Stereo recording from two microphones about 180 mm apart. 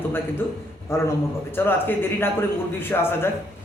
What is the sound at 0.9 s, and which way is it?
A man's voice, 15° left (ahead or behind).